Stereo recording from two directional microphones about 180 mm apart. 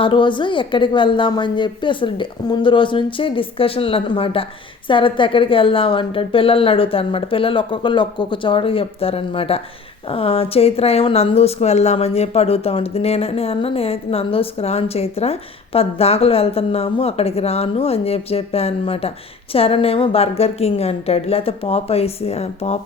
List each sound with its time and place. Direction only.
0.0 s a woman's voice: 25° left (ahead or behind)